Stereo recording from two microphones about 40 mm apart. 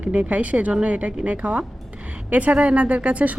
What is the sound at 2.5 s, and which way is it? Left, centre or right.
Speech, right.